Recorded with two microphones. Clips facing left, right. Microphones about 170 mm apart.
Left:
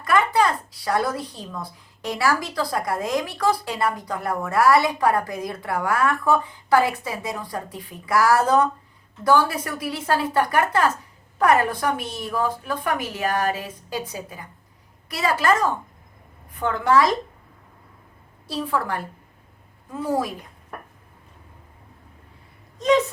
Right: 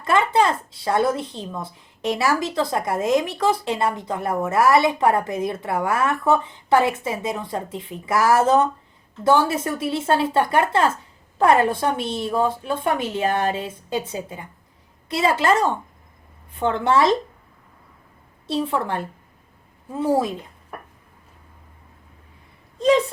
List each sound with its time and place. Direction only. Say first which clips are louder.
0.0 s speech: right 1 dB; 25° right (ahead or behind)
18.4 s speech: right 2 dB; 25° right (ahead or behind)
22.8 s speech: right 2 dB; 30° right (ahead or behind)